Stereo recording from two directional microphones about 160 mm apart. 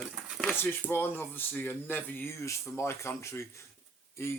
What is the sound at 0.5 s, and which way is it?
Speech, 15° left (ahead or behind).